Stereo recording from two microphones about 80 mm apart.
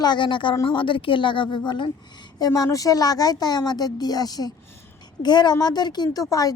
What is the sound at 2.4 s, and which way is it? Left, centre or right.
A woman's voice, left.